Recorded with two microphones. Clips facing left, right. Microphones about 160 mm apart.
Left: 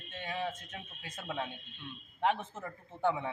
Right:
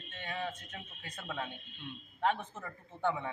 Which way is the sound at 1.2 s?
20° left (ahead or behind).